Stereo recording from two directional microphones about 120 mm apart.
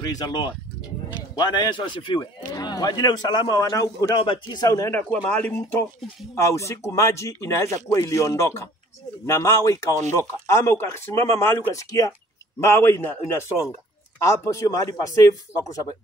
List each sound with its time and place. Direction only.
0.0 s a man's voice: 35° left (ahead or behind)
4.2 s a man's voice: 40° left (ahead or behind)
4.9 s a man's voice: 10° left (ahead or behind)
6.3 s speech: 25° left (ahead or behind)